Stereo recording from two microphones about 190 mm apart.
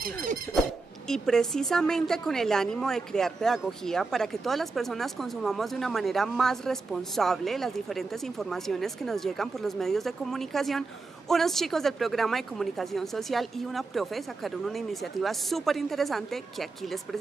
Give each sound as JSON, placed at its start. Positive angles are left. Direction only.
{"t": 0.0, "sound": "squeak", "side_deg": -50}
{"t": 0.6, "sound": "speech", "side_deg": 0}